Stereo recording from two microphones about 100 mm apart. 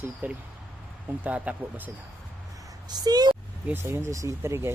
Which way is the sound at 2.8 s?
40° right (ahead or behind).